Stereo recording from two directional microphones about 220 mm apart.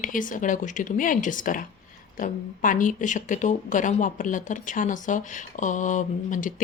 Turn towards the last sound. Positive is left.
turn(degrees=35)  # may be behind; listen again after turning